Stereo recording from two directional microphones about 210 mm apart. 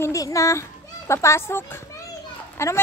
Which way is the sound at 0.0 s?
15° left (ahead or behind).